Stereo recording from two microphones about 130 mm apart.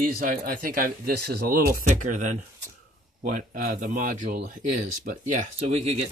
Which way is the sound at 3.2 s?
85° right.